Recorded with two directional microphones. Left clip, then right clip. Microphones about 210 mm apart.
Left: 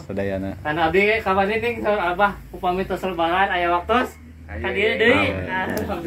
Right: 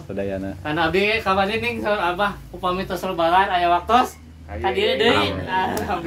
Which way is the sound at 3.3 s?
90° right.